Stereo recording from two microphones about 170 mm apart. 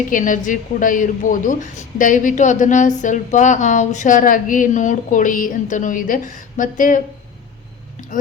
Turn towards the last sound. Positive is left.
turn(degrees=50)  # may be behind; listen again after turning